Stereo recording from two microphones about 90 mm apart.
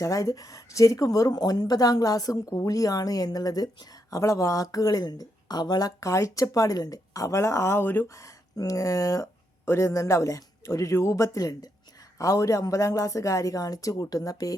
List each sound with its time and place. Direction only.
0.0 s speech: 40° left (ahead or behind); by 8.0 s 20° left (ahead or behind)
8.0 s speech: 35° left (ahead or behind)